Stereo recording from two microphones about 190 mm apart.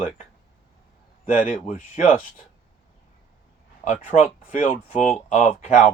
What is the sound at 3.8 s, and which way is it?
Speech, 40° left (ahead or behind).